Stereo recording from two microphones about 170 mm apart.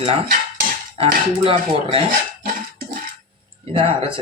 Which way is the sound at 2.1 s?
55° right (ahead or behind).